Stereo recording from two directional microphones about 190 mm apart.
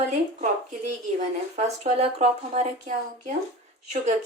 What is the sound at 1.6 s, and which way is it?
A woman's voice, 35° right (ahead or behind).